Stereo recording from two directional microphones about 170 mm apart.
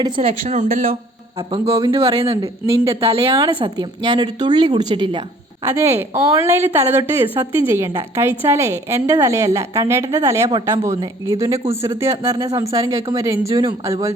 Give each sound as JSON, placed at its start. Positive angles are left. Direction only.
{"t": 0.2, "sound": "speech", "side_deg": -35}
{"t": 1.4, "sound": "a woman's voice", "side_deg": -30}
{"t": 5.6, "sound": "a woman's voice", "side_deg": -15}